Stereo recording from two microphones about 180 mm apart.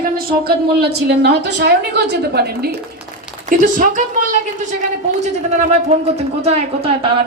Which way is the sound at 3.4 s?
45° right (ahead or behind).